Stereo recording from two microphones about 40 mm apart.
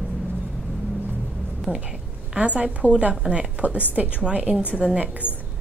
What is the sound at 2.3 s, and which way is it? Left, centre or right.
A woman's voice, right.